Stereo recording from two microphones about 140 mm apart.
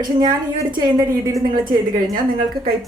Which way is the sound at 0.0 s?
30° right (ahead or behind).